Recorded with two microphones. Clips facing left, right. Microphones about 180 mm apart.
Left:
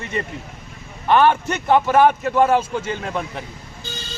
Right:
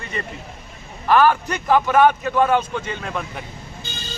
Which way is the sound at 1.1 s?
25° left (ahead or behind).